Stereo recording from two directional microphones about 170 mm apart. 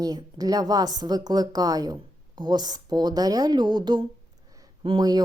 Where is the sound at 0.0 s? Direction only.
20° right (ahead or behind).